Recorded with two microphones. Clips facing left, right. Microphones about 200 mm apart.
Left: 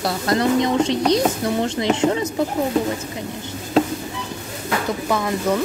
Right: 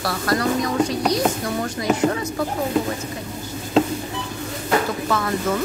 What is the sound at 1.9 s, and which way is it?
Speech, 20° left (ahead or behind).